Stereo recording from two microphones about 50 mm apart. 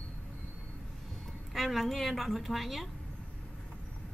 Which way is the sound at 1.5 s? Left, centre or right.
Centre.